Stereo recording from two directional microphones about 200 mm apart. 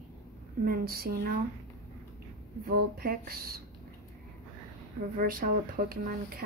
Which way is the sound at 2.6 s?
50° right (ahead or behind).